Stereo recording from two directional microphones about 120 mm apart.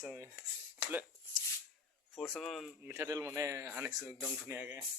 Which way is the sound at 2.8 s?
20° right (ahead or behind).